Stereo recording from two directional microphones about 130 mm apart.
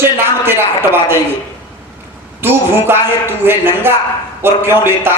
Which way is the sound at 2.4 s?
15° right (ahead or behind).